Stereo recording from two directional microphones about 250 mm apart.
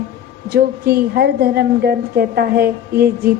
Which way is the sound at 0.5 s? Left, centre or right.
Right.